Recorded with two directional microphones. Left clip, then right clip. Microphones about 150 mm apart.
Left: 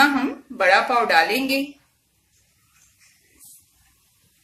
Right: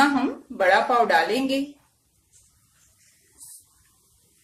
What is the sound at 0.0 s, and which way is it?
A woman's voice, 30° right (ahead or behind).